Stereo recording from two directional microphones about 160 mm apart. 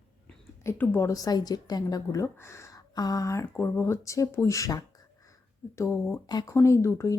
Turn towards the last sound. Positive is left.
turn(degrees=20)  # may be behind; listen again after turning